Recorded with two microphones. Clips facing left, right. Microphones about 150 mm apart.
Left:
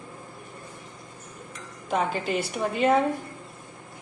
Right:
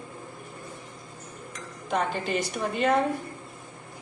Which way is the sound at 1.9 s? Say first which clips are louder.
Left 1 dB; 5° left (ahead or behind).